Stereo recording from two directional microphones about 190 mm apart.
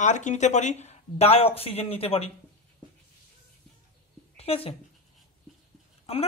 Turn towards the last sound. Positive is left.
turn(degrees=30)  # may be behind; listen again after turning